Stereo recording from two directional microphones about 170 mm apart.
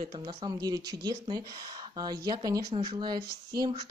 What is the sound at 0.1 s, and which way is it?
Speech, 30° right (ahead or behind).